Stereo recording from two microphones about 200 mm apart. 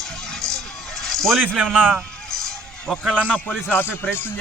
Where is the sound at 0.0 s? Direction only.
Centre (ahead or behind).